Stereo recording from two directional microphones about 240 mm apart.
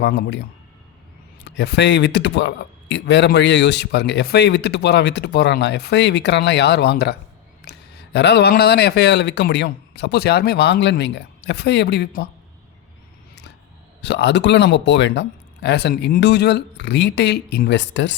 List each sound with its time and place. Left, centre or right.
0.0 s speech: left
1.5 s speech: left
14.0 s speech: left